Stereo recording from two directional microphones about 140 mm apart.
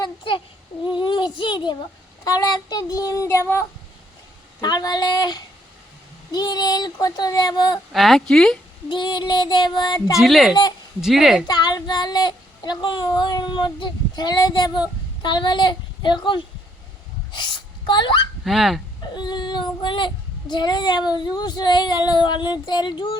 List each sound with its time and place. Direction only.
0.0 s a child's voice: 35° left (ahead or behind)
2.2 s child singing: 25° left (ahead or behind)
4.6 s child singing: 30° left (ahead or behind)
7.9 s speech: centre (ahead or behind)
8.9 s child singing: 35° left (ahead or behind)
10.2 s speech: centre (ahead or behind)
10.5 s child singing: 30° left (ahead or behind)
11.0 s speech: centre (ahead or behind)
11.4 s child singing: 30° left (ahead or behind)
17.3 s speech: 35° left (ahead or behind)
18.4 s speech: centre (ahead or behind)
19.1 s child singing: 30° left (ahead or behind)